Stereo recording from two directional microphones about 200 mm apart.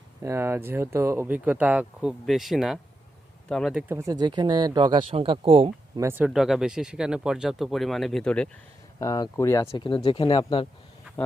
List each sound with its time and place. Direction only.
0.2 s speech: 15° right (ahead or behind)
6.0 s speech: 10° right (ahead or behind)
9.0 s speech: 20° left (ahead or behind)